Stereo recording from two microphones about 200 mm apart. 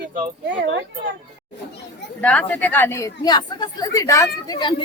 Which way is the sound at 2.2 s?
5° left (ahead or behind).